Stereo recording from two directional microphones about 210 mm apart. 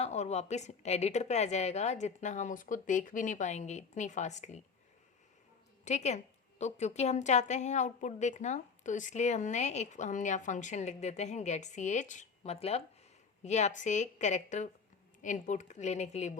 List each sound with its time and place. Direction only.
0.0 s a woman's voice: 30° left (ahead or behind)
5.8 s a woman's voice: 35° left (ahead or behind)